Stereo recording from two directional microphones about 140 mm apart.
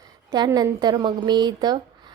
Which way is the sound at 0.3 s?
30° right (ahead or behind).